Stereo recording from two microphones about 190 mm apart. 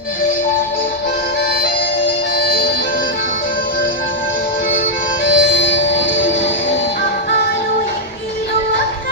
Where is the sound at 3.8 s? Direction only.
85° left.